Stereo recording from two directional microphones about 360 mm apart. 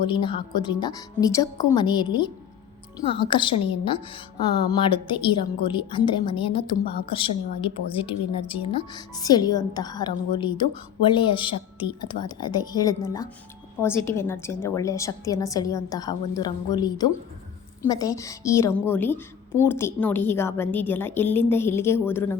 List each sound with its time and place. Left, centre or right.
0.0 s a woman's voice: centre